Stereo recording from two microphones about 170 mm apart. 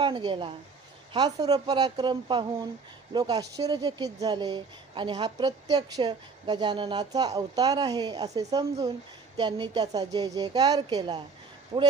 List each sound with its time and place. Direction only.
0.0 s a woman's voice: 30° right (ahead or behind)